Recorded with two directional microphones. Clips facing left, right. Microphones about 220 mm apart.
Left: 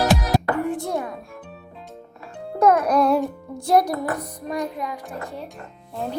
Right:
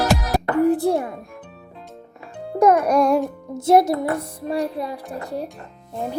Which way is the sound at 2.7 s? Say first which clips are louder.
Right 1 dB; 10° right (ahead or behind).